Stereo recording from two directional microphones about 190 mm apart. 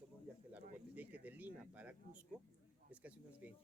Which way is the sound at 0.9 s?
10° right (ahead or behind).